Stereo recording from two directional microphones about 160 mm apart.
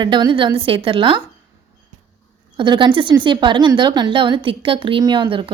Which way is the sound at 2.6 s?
30° right (ahead or behind).